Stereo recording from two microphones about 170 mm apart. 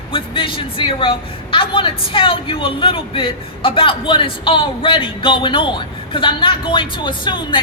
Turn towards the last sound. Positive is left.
turn(degrees=30)  # may be behind; listen again after turning